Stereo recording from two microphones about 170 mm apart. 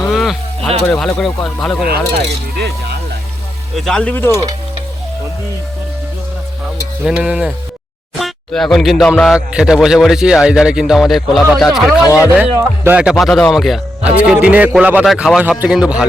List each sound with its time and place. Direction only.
0.1 s livestock: centre (ahead or behind)
0.9 s speech: 5° left (ahead or behind)
1.8 s speech: 70° right (ahead or behind)
3.8 s speech: 5° left (ahead or behind)
7.0 s speech: 5° right (ahead or behind)
12.0 s speech: 20° left (ahead or behind)
12.3 s speech: 10° right (ahead or behind)